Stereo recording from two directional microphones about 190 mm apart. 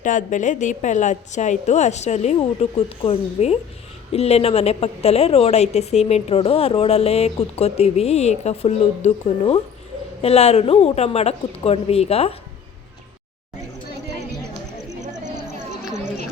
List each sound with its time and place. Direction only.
0.0 s a woman's voice: 40° left (ahead or behind)
15.2 s a sound: 40° right (ahead or behind)
15.8 s chatter: centre (ahead or behind)